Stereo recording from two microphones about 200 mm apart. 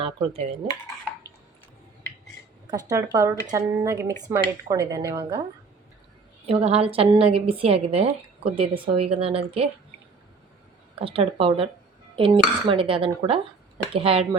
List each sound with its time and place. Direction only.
0.0 s a woman's voice: 30° right (ahead or behind)
2.6 s speech: 15° right (ahead or behind)
6.4 s a woman's voice: 30° right (ahead or behind)
11.0 s a woman's voice: 30° right (ahead or behind)